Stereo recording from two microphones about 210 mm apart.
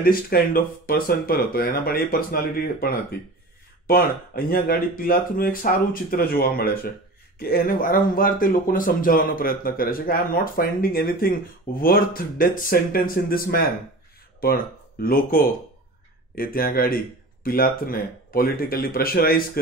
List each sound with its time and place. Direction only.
0.0 s speech: 45° left (ahead or behind)